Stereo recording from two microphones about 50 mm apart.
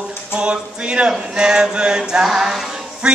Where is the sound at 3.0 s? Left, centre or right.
Centre.